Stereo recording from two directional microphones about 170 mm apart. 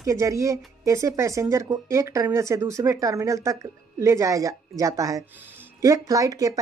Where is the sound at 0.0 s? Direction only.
20° right (ahead or behind).